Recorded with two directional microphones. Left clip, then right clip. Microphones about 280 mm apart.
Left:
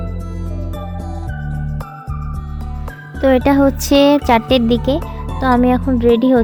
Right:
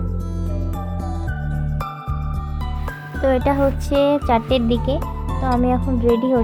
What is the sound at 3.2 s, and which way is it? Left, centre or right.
Speech, left.